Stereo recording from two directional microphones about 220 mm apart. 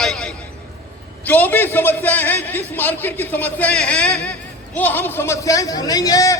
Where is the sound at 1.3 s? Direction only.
10° left (ahead or behind).